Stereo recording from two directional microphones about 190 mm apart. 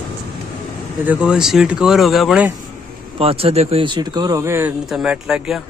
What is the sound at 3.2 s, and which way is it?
Speech, 30° right (ahead or behind).